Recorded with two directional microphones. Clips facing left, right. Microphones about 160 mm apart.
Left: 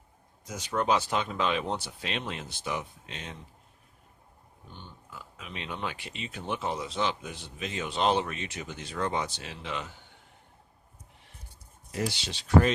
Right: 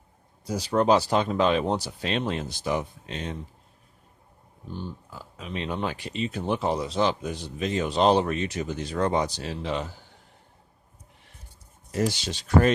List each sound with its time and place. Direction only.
0.4 s speech: 35° right (ahead or behind)
4.7 s speech: 35° right (ahead or behind)
11.9 s speech: 45° right (ahead or behind)